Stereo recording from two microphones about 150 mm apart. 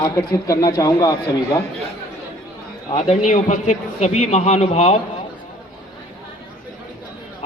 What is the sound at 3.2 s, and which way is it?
A man's voice, 50° left (ahead or behind).